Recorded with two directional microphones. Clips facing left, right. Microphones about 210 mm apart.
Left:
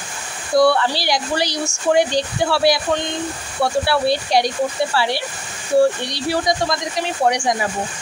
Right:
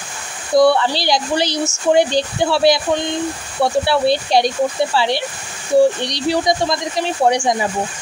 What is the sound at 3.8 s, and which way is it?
Speech, 25° right (ahead or behind).